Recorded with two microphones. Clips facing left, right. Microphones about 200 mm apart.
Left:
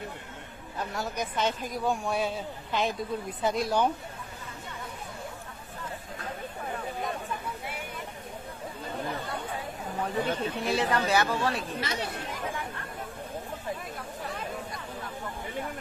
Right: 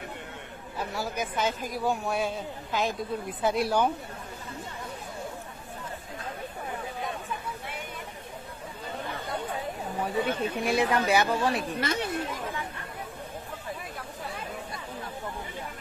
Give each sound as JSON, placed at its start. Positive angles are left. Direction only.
{"t": 0.9, "sound": "speech", "side_deg": -5}
{"t": 10.0, "sound": "speech", "side_deg": -10}
{"t": 11.8, "sound": "speech", "side_deg": -50}